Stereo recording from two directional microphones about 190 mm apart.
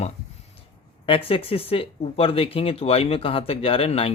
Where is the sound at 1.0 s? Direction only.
30° left (ahead or behind).